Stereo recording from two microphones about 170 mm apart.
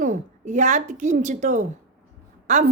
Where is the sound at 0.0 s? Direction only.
45° right (ahead or behind).